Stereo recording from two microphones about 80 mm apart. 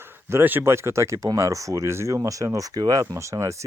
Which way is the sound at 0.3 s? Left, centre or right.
Right.